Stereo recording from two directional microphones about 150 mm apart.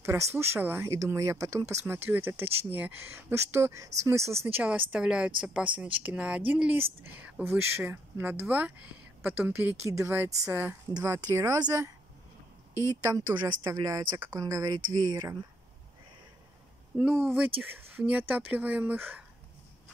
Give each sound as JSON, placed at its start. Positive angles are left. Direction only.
{"t": 0.0, "sound": "a woman's voice", "side_deg": -20}
{"t": 13.1, "sound": "a woman's voice", "side_deg": -20}
{"t": 16.9, "sound": "speech", "side_deg": -10}